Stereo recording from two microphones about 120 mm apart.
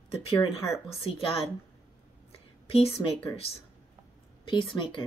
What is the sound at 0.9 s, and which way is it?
Speech, 50° left (ahead or behind).